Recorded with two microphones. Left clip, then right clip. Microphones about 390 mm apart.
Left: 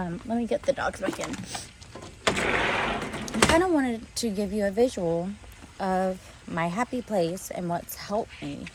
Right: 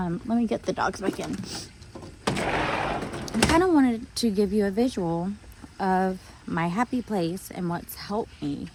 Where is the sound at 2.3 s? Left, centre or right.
Right.